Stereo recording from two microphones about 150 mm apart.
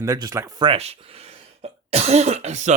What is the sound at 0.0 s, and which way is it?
Speech, 20° right (ahead or behind).